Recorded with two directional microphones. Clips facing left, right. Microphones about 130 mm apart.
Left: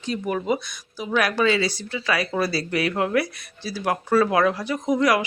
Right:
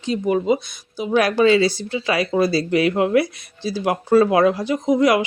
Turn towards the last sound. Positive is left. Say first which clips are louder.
# right 4 dB
turn(degrees=-25)  # may be behind; listen again after turning